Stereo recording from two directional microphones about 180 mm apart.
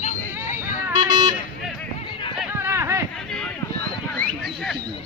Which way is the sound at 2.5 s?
15° right (ahead or behind).